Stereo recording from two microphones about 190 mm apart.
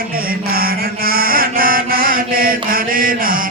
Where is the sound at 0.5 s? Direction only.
50° right (ahead or behind).